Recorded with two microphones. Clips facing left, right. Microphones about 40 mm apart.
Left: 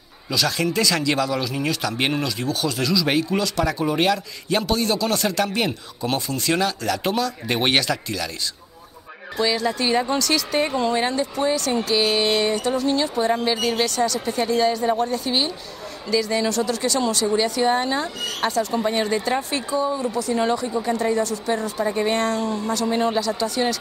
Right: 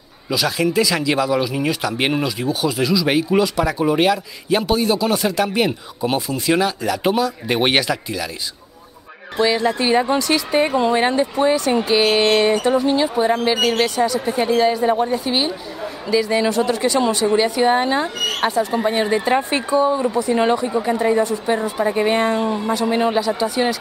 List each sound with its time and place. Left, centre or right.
0.3 s speech: centre
9.4 s a woman's voice: right
12.0 s a woman's voice: right
20.9 s a woman's voice: centre